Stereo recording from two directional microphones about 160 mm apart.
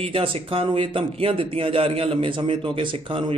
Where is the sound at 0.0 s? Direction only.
35° right (ahead or behind).